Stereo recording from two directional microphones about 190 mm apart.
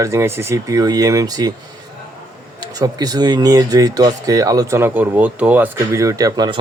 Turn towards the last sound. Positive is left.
turn(degrees=-20)  # may be behind; listen again after turning